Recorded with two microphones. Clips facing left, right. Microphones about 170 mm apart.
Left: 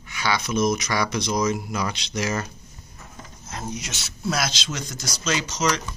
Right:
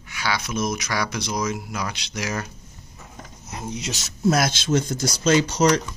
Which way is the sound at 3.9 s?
40° right (ahead or behind).